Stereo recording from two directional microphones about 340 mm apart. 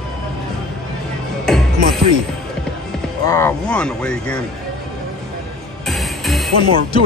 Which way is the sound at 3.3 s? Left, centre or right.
Centre.